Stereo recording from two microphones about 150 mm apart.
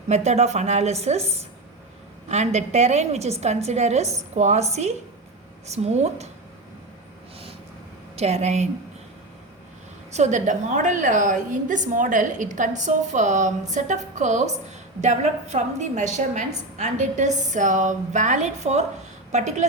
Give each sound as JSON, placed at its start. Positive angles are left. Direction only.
{"t": 0.1, "sound": "a woman's voice", "side_deg": -50}
{"t": 8.1, "sound": "a woman's voice", "side_deg": -45}
{"t": 10.1, "sound": "a woman's voice", "side_deg": -50}